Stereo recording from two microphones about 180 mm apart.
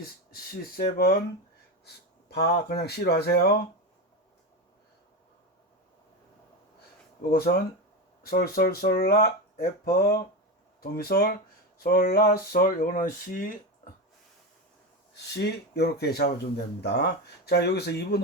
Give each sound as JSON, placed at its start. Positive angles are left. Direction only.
{"t": 0.7, "sound": "speech", "side_deg": 55}
{"t": 7.2, "sound": "speech", "side_deg": 60}
{"t": 15.1, "sound": "speech", "side_deg": 70}